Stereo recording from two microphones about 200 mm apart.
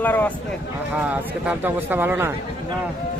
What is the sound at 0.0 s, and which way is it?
Speech, 10° left (ahead or behind).